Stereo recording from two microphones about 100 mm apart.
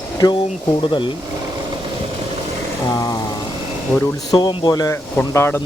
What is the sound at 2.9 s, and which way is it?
Vehicle, 35° left (ahead or behind).